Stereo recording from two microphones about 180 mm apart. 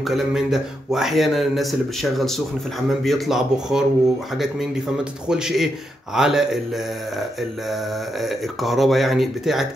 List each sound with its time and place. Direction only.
0.0 s a man's voice: centre (ahead or behind)
5.3 s a man's voice: 5° right (ahead or behind)
8.2 s a man's voice: centre (ahead or behind)